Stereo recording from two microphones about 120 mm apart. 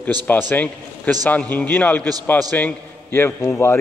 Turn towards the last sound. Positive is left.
turn(degrees=20)  # may be behind; listen again after turning